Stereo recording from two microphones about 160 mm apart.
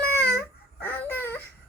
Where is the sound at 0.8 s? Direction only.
10° left (ahead or behind).